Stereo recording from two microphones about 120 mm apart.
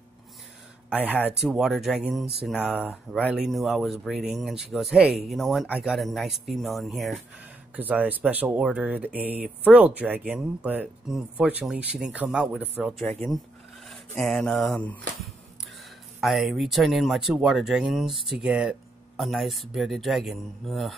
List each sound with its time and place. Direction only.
0.8 s speech: 15° right (ahead or behind)
1.4 s speech: centre (ahead or behind)
7.7 s speech: 15° right (ahead or behind)
13.0 s speech: 15° left (ahead or behind)
14.2 s speech: 5° left (ahead or behind)
16.2 s speech: centre (ahead or behind)